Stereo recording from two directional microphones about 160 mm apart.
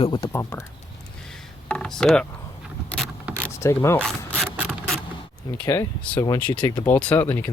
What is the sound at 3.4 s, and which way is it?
Vehicle, 15° left (ahead or behind).